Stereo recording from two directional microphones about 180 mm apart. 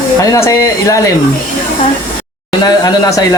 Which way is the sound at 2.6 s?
20° left (ahead or behind).